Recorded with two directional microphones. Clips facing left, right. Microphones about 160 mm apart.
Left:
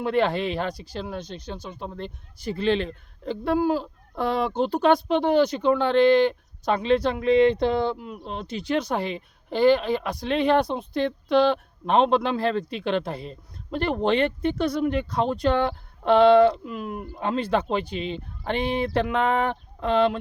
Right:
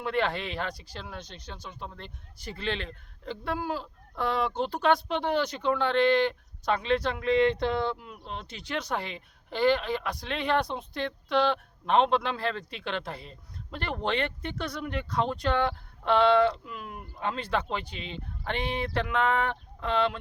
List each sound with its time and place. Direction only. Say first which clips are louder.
0.0 s speech: left 6 dB; 40° left (ahead or behind)
1.2 s speech: left 9 dB; 5° left (ahead or behind)
2.5 s speech: left 10 dB; 40° left (ahead or behind)